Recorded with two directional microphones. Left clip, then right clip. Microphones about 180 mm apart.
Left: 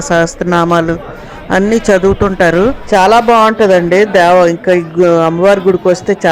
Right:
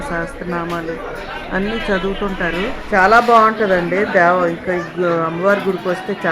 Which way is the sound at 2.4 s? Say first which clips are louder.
Left 14 dB; 50° left (ahead or behind).